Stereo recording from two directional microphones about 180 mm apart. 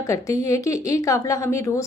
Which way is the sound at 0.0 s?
15° left (ahead or behind).